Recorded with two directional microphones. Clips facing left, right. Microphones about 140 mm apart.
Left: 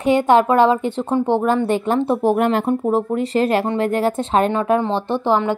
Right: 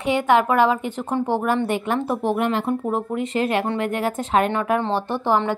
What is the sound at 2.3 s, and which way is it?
Speech, 45° left (ahead or behind).